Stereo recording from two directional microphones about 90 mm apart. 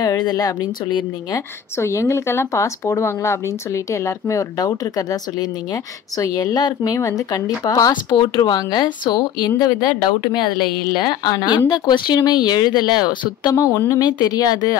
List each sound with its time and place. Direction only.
0.0 s speech: 50° left (ahead or behind)
1.8 s speech: 35° left (ahead or behind)
7.9 s speech: 60° left (ahead or behind)
13.6 s speech: 40° left (ahead or behind)